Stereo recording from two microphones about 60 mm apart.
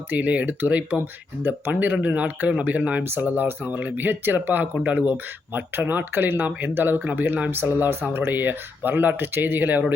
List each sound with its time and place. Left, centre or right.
0.1 s a man's voice: right
5.1 s speech: right